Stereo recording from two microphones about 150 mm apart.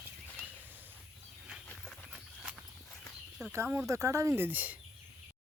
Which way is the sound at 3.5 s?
20° right (ahead or behind).